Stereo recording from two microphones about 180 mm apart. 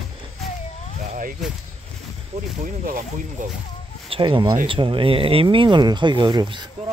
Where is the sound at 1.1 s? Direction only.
50° right (ahead or behind).